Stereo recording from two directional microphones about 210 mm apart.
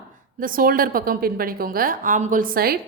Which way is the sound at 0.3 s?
40° right (ahead or behind).